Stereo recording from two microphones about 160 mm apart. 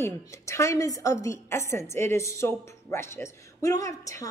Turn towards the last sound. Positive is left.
turn(degrees=20)  # may be behind; listen again after turning